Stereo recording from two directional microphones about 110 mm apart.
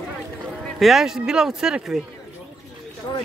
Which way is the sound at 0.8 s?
Centre (ahead or behind).